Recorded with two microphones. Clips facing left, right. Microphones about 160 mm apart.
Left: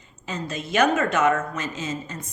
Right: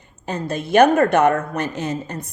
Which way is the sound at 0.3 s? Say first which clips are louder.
Right 7 dB; 60° right (ahead or behind).